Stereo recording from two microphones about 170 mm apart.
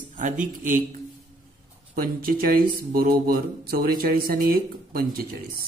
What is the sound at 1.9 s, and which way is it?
Speech, 60° right (ahead or behind).